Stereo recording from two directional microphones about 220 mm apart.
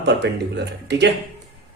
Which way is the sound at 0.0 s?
50° right (ahead or behind).